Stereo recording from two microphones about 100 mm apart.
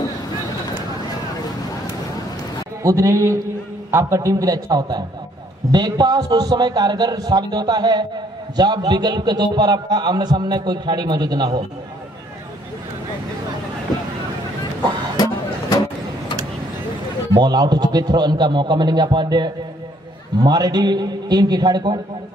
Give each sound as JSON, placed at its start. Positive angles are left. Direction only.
{"t": 2.8, "sound": "a man's voice", "side_deg": -30}
{"t": 17.4, "sound": "a man's voice", "side_deg": -45}